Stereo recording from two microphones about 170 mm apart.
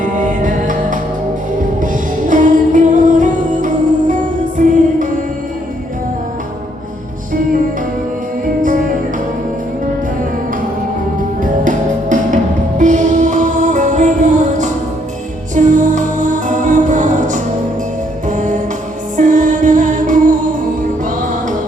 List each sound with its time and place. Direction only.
0.0 s music: 50° right (ahead or behind)
11.4 s music: 50° right (ahead or behind)